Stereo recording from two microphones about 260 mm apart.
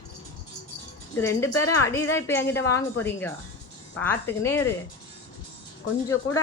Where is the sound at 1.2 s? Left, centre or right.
Centre.